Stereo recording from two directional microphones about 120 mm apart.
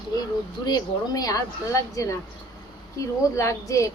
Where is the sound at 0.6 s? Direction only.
35° left (ahead or behind).